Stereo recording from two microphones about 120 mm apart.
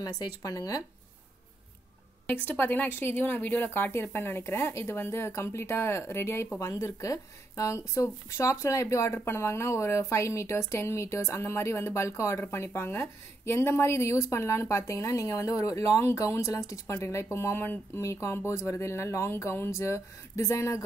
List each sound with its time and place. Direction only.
0.2 s speech: 30° left (ahead or behind)
2.2 s speech: 15° left (ahead or behind)